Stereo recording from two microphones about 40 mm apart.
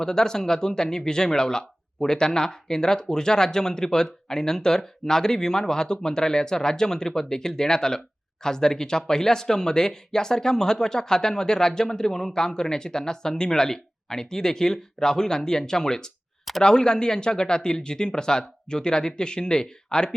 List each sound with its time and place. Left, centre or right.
0.0 s speech: centre